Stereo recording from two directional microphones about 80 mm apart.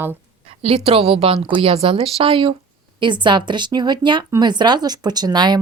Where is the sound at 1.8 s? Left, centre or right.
Right.